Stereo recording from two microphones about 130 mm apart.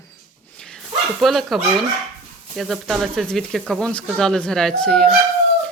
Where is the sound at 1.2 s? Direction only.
Centre (ahead or behind).